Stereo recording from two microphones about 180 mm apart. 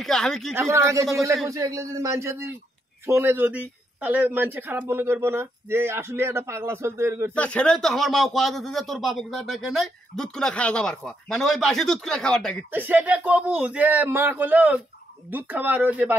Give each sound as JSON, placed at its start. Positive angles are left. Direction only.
{"t": 0.0, "sound": "speech", "side_deg": 5}
{"t": 0.6, "sound": "speech", "side_deg": -15}
{"t": 7.3, "sound": "speech", "side_deg": 5}
{"t": 12.7, "sound": "speech", "side_deg": -10}